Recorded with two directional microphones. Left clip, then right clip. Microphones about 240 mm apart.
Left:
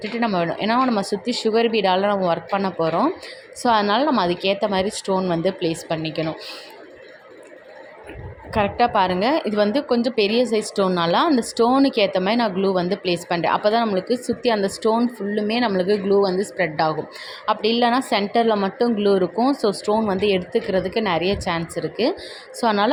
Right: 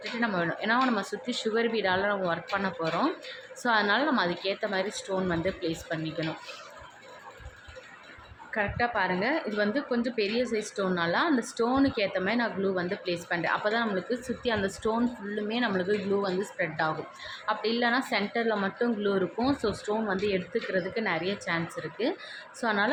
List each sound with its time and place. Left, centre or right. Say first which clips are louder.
0.2 s a woman's voice: left 8 dB; left
8.5 s a woman's voice: left 10 dB; left